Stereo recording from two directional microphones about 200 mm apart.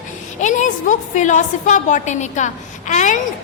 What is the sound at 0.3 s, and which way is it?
A woman's voice, 40° left (ahead or behind).